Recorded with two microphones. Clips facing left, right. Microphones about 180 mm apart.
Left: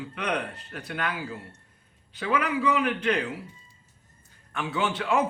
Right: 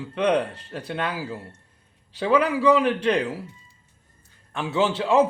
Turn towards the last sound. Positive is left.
turn(degrees=-30)  # may be behind; listen again after turning